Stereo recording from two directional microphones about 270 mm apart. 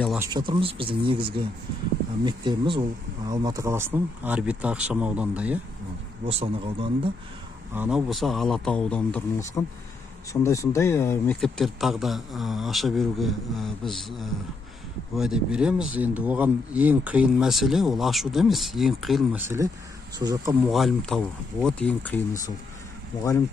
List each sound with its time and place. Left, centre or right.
0.2 s speech: centre
6.2 s speech: centre
7.7 s speech: centre
20.7 s speech: centre